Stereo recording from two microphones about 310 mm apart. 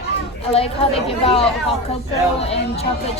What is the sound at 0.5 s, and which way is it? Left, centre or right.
Speech, centre.